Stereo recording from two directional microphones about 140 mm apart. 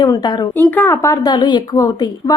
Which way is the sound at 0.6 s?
15° left (ahead or behind).